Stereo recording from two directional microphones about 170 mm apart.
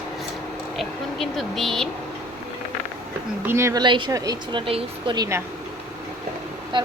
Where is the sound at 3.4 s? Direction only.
15° right (ahead or behind).